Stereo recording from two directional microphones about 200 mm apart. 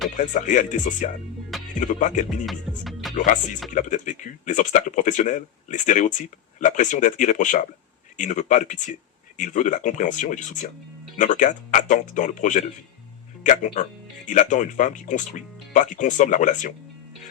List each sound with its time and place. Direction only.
0.2 s speech: 40° left (ahead or behind)
2.5 s music: centre (ahead or behind)
3.8 s speech: 40° left (ahead or behind)